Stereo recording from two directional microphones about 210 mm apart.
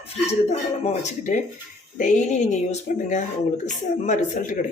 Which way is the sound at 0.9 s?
35° left (ahead or behind).